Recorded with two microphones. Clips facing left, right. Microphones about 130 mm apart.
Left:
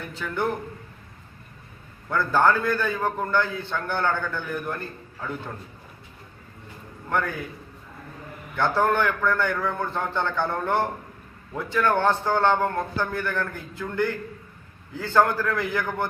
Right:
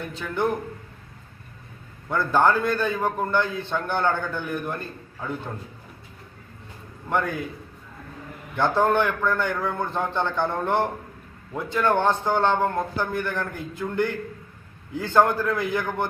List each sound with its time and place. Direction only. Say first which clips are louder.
0.1 s a man's voice: right 1 dB; 20° right (ahead or behind)
2.0 s a man's voice: right 1 dB; 15° right (ahead or behind)
7.1 s a man's voice: right 1 dB; 15° right (ahead or behind)
8.5 s a man's voice: right 1 dB; 20° right (ahead or behind)